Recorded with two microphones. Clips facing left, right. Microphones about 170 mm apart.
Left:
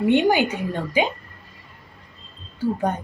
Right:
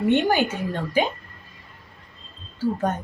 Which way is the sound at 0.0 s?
15° left (ahead or behind).